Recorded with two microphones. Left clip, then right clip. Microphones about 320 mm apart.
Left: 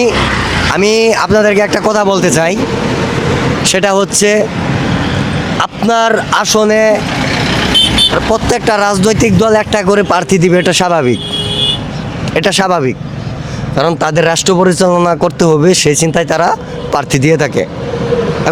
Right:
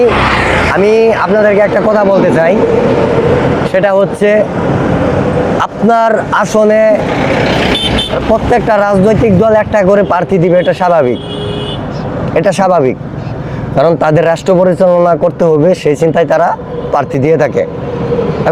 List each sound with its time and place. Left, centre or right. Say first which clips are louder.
0.7 s speech: even; left
3.7 s speech: even; left
5.5 s speech: even; centre
8.3 s speech: right 2 dB; left
12.5 s speech: right 3 dB; centre